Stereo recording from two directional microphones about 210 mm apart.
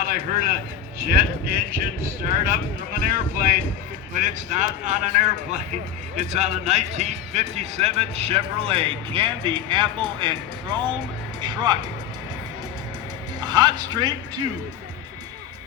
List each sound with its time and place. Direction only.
0.0 s a man's voice: 45° right (ahead or behind); by 11.8 s 20° right (ahead or behind)
13.4 s speech: 20° right (ahead or behind)